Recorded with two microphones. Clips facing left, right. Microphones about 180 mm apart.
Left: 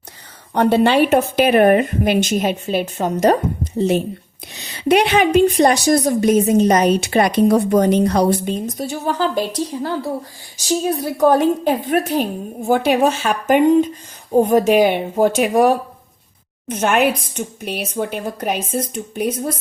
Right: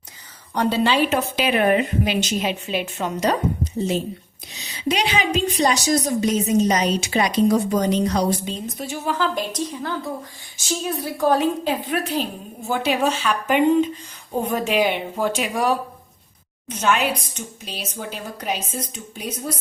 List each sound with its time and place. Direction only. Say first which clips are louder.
0.5 s a woman's voice: left 6 dB; 55° left (ahead or behind)
8.6 s a woman's voice: left 4 dB; 40° left (ahead or behind); by 19.5 s 55° left (ahead or behind)